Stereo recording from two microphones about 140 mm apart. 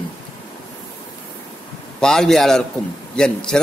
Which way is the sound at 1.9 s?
5° left (ahead or behind).